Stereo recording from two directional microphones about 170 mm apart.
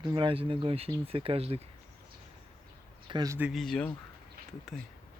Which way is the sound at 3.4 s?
Centre (ahead or behind).